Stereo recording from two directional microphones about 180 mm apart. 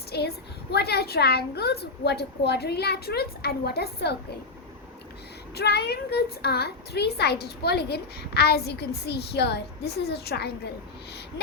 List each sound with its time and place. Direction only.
0.1 s a woman's voice: 65° left (ahead or behind)
5.5 s a woman's voice: 65° left (ahead or behind)